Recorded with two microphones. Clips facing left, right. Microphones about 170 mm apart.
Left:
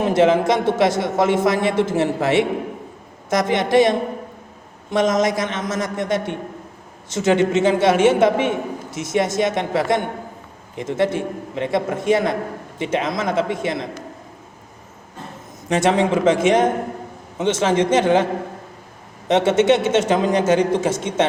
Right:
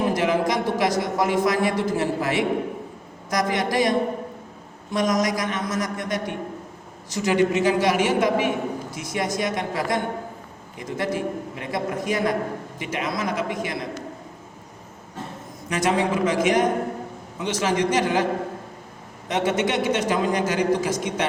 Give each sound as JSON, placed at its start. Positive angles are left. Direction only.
{"t": 0.0, "sound": "a man's voice", "side_deg": 25}
{"t": 15.7, "sound": "a man's voice", "side_deg": 25}
{"t": 19.3, "sound": "a man's voice", "side_deg": 25}